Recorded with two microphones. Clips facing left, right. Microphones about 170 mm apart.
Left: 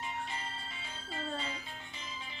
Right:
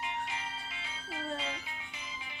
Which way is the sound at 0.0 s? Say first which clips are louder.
Right 2 dB; 65° right (ahead or behind).